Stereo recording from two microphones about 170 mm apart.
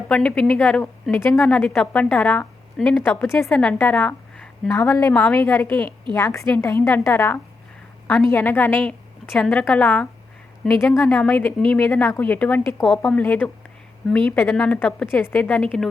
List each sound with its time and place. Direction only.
0.1 s a woman's voice: 5° left (ahead or behind)
3.1 s a woman's voice: 15° left (ahead or behind)